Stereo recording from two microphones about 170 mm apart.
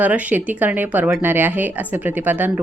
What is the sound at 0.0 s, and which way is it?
A woman's voice, 10° right (ahead or behind).